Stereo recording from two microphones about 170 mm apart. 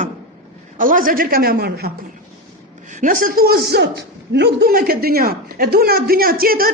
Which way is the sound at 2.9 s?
50° right (ahead or behind).